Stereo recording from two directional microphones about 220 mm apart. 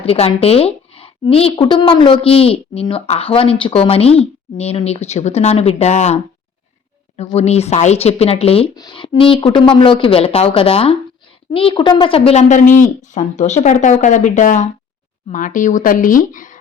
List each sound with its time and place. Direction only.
0.0 s a woman's voice: 25° left (ahead or behind)
7.2 s a woman's voice: 30° left (ahead or behind)